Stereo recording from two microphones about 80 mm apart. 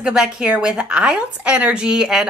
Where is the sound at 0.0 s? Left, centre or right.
Centre.